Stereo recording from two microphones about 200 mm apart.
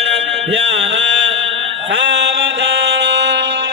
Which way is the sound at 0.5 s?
60° right (ahead or behind).